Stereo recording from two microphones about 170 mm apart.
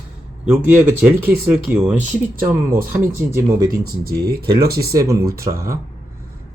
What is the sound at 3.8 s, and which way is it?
Speech, 65° right (ahead or behind).